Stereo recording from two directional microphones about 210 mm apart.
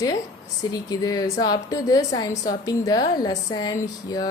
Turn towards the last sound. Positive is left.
turn(degrees=20)  # may be behind; listen again after turning